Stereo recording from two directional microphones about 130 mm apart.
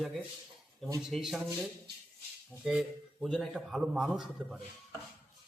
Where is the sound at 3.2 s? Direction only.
Centre (ahead or behind).